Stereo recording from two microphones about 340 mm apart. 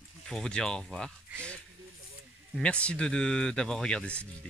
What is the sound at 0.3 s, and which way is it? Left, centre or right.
Speech, centre.